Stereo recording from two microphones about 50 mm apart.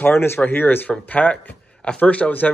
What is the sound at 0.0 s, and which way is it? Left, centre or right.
Speech, left.